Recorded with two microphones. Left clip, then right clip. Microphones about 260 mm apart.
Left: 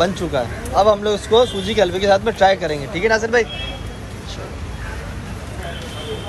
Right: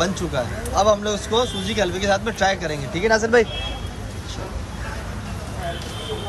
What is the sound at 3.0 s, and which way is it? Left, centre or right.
Speech, right.